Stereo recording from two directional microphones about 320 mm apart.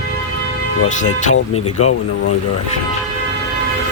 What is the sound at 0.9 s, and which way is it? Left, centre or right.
Speech, left.